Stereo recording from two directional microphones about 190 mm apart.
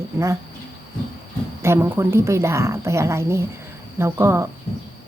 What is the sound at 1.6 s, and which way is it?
Speech, 15° right (ahead or behind).